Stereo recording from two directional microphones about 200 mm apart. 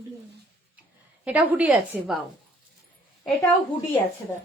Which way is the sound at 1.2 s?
10° right (ahead or behind).